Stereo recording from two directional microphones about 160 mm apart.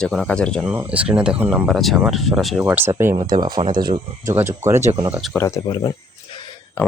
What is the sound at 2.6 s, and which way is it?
Speech, 15° right (ahead or behind).